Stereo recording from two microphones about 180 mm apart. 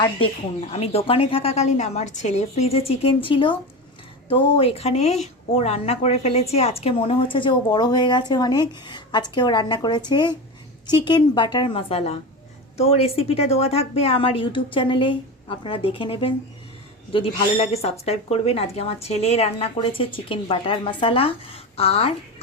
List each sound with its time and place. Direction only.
0.7 s a woman's voice: 35° left (ahead or behind)